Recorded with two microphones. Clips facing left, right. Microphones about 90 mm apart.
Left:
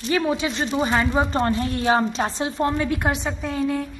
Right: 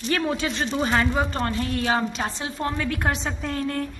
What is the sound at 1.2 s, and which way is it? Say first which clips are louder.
A woman's voice: left 4 dB; 25° left (ahead or behind).